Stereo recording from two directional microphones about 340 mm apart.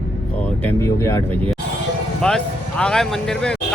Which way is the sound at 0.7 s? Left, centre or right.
Centre.